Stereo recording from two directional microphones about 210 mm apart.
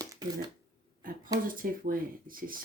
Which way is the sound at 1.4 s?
40° right (ahead or behind).